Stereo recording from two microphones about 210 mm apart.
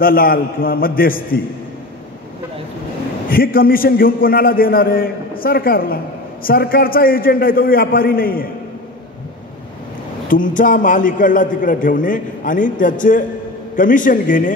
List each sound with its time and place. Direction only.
0.0 s a man's voice: 45° left (ahead or behind)
3.3 s a man's voice: 45° left (ahead or behind)
10.2 s a man's voice: 40° left (ahead or behind)